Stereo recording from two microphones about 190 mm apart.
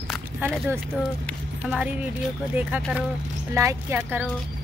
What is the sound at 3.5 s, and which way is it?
Speech, 15° right (ahead or behind).